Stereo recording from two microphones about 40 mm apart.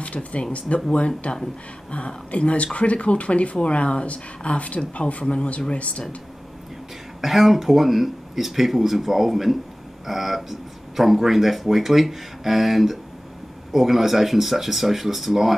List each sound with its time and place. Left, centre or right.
0.0 s speech: left
7.2 s speech: centre